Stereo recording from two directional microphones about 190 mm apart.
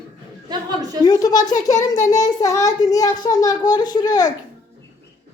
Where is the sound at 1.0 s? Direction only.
20° left (ahead or behind).